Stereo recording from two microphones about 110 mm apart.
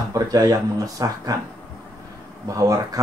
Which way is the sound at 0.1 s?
30° right (ahead or behind).